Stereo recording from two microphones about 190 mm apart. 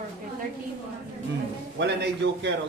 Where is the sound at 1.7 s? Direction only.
65° right (ahead or behind).